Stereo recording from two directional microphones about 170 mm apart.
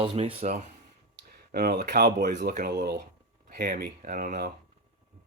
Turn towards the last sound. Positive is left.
turn(degrees=-60)  # may be behind; listen again after turning